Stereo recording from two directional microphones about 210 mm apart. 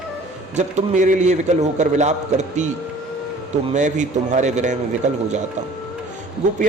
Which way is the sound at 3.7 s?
35° right (ahead or behind).